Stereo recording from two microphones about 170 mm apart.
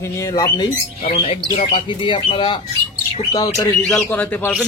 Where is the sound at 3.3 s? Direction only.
20° left (ahead or behind).